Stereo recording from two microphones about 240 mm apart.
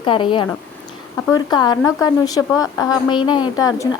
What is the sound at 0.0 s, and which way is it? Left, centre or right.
A woman's voice, left.